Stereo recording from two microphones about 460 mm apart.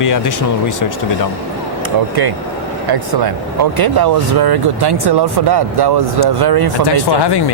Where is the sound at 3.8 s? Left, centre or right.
Right.